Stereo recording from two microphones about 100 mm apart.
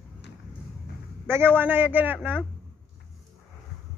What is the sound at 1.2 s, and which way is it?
Speech, 20° right (ahead or behind).